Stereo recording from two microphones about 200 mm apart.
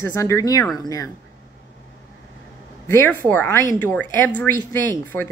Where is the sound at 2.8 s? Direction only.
10° left (ahead or behind).